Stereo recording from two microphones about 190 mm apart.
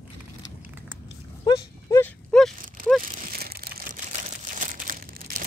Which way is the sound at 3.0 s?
45° right (ahead or behind).